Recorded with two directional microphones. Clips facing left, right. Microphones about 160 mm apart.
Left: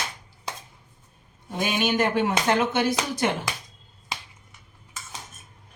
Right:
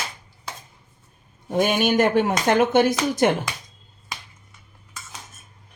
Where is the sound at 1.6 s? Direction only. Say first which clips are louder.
Right 5 dB; 50° right (ahead or behind).